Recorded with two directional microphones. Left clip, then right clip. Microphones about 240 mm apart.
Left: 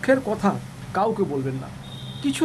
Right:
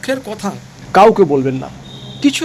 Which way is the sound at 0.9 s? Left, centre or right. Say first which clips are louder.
Right 15 dB; right.